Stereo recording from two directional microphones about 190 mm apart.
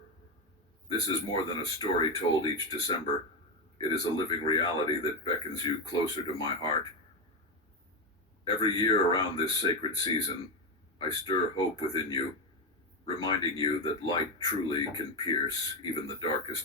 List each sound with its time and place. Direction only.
0.9 s speech: 20° left (ahead or behind)
8.4 s speech: 20° left (ahead or behind)
11.2 s speech: 20° left (ahead or behind)